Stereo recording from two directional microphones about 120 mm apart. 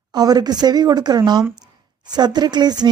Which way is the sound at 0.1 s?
35° right (ahead or behind).